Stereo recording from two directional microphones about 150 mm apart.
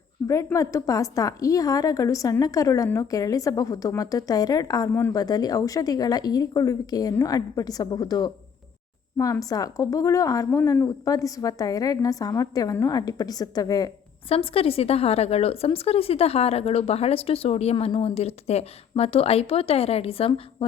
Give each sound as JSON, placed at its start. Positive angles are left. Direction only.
{"t": 0.3, "sound": "a woman's voice", "side_deg": 20}
{"t": 14.3, "sound": "speech", "side_deg": 40}